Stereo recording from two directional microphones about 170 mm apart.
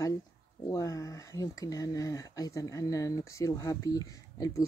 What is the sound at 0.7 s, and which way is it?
Speech, 20° left (ahead or behind).